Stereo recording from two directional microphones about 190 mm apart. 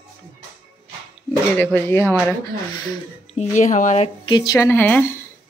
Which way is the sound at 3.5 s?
40° left (ahead or behind).